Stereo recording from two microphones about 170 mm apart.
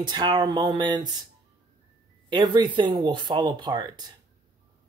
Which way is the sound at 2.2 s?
25° right (ahead or behind).